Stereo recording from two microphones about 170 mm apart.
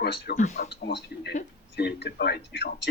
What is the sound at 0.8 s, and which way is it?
Speech, 75° left (ahead or behind).